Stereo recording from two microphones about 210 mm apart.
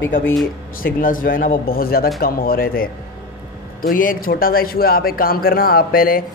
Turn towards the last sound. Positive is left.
turn(degrees=45)  # may be behind; listen again after turning